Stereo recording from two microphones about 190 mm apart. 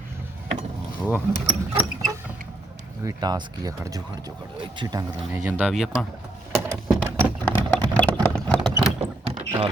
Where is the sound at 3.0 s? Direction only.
20° right (ahead or behind); by 6.0 s centre (ahead or behind).